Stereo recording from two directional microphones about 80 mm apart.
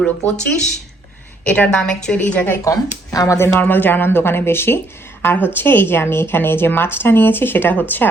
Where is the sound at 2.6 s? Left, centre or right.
Left.